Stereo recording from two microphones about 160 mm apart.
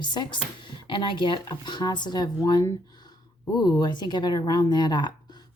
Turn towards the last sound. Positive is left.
turn(degrees=30)  # may be behind; listen again after turning